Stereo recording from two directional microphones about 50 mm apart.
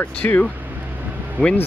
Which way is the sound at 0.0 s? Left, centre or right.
Left.